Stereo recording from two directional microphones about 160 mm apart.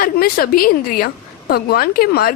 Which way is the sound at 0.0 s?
65° left (ahead or behind).